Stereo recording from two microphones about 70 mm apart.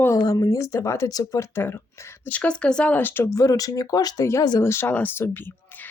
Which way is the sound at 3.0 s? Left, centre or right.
Left.